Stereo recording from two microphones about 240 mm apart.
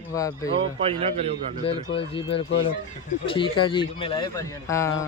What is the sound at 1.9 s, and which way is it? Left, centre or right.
A man's voice, left.